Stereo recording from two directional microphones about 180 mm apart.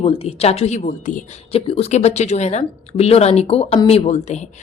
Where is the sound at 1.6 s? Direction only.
35° left (ahead or behind).